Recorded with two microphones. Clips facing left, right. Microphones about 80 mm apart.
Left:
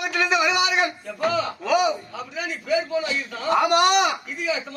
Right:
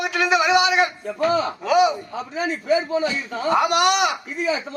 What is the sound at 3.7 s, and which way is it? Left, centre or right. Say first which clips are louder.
Speech: even; left.